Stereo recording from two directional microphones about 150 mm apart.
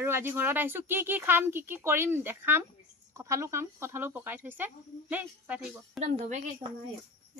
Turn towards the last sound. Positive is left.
turn(degrees=-35)  # may be behind; listen again after turning